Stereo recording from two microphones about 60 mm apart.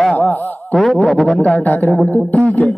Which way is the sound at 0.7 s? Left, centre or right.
Centre.